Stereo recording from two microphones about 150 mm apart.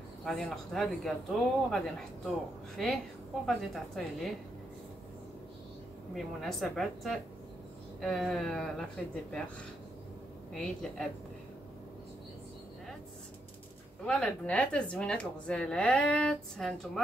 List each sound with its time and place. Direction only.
0.2 s speech: centre (ahead or behind)
3.4 s speech: centre (ahead or behind)
6.1 s speech: centre (ahead or behind)
10.5 s speech: 5° left (ahead or behind)
14.0 s speech: 10° left (ahead or behind)